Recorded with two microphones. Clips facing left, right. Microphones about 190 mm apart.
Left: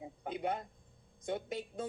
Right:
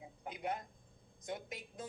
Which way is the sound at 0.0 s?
30° left (ahead or behind).